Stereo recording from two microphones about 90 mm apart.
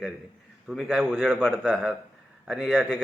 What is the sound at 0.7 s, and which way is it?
A man's voice, centre (ahead or behind).